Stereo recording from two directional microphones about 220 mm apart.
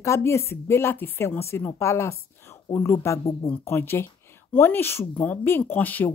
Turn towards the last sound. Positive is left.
turn(degrees=10)  # may be behind; listen again after turning